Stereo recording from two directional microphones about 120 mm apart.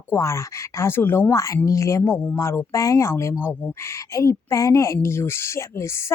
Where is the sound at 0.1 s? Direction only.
25° left (ahead or behind).